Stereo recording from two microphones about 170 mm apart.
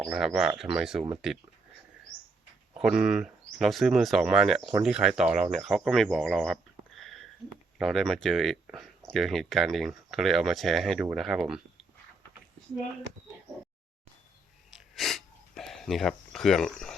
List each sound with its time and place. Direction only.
0.0 s speech: centre (ahead or behind)
2.8 s speech: 5° right (ahead or behind)
7.8 s speech: centre (ahead or behind)
14.7 s a sound: centre (ahead or behind)